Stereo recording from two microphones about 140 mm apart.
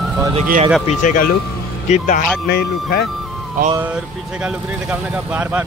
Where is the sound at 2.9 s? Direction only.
90° left.